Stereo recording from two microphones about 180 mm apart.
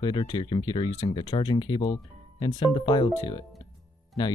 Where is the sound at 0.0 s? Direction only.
25° left (ahead or behind).